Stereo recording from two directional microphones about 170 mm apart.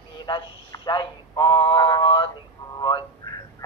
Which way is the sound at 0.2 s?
25° left (ahead or behind).